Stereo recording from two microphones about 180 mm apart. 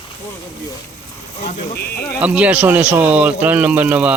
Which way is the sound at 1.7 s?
65° left (ahead or behind).